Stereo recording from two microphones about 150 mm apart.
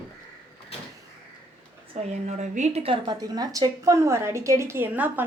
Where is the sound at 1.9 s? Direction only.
50° right (ahead or behind); by 5.2 s 10° right (ahead or behind).